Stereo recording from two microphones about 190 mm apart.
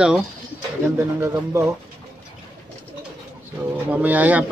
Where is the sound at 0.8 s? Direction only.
15° right (ahead or behind).